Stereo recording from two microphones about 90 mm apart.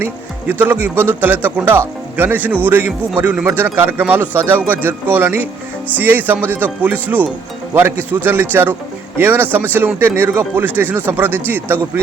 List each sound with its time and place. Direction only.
0.0 s a man's voice: 20° right (ahead or behind)